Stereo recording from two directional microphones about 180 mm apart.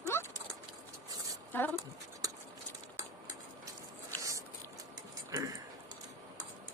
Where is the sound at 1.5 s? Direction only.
10° left (ahead or behind).